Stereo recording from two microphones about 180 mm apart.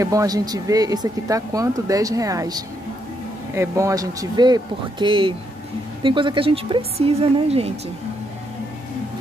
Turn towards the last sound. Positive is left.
turn(degrees=-35)  # may be behind; listen again after turning